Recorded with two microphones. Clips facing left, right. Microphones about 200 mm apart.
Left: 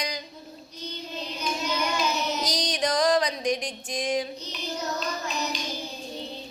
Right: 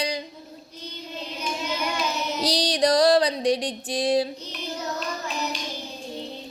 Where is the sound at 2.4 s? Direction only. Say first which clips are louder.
Right 5 dB; 35° right (ahead or behind).